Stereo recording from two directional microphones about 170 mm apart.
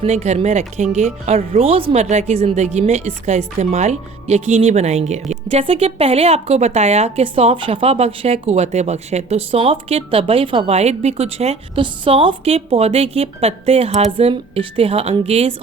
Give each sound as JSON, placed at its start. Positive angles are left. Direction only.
{"t": 0.0, "sound": "speech", "side_deg": -40}